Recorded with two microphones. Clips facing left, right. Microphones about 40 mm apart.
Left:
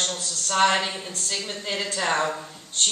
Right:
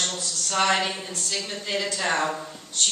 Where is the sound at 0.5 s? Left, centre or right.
Left.